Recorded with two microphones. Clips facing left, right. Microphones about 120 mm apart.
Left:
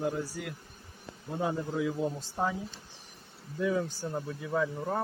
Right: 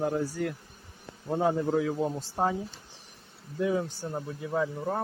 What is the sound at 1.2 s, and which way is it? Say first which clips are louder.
Speech: right 6 dB; 55° right (ahead or behind).